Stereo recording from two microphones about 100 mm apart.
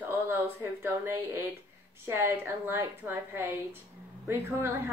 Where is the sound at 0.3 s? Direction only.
25° right (ahead or behind).